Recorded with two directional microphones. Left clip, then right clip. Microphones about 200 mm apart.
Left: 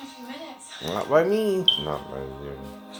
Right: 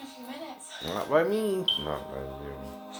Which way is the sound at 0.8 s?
15° left (ahead or behind).